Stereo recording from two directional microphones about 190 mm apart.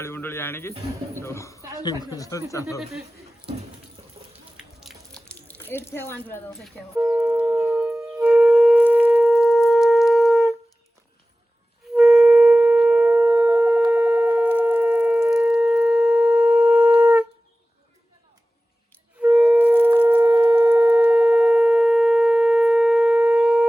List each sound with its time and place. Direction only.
0.0 s speech: 10° left (ahead or behind)
4.0 s a sound: 25° right (ahead or behind)
4.5 s a sound: centre (ahead or behind)
6.9 s wind instrument: 5° right (ahead or behind)
9.0 s shofar: centre (ahead or behind)
11.9 s shofar: 5° right (ahead or behind)
19.2 s wind instrument: 5° right (ahead or behind)
20.2 s shofar: 25° right (ahead or behind)
20.7 s shofar: 5° right (ahead or behind)